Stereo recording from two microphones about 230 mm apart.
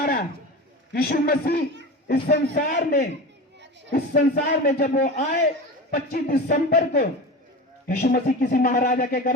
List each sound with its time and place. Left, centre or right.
0.9 s speech: left